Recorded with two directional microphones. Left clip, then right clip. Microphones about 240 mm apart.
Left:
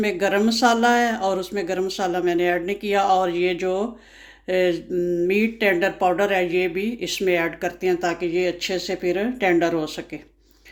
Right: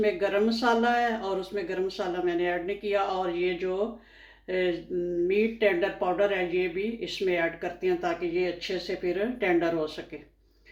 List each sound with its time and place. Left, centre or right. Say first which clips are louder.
0.0 s speech: left 4 dB; left